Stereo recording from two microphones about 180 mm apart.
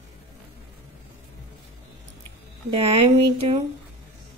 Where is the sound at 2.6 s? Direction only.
30° right (ahead or behind).